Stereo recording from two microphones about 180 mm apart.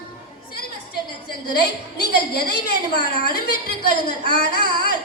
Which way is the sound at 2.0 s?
60° left (ahead or behind).